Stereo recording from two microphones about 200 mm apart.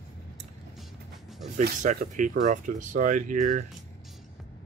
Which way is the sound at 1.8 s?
40° right (ahead or behind).